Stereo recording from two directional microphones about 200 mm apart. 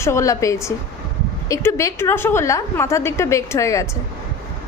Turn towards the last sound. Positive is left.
turn(degrees=15)  # may be behind; listen again after turning